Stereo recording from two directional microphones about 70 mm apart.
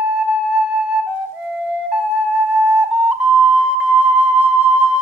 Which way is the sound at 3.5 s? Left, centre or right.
Centre.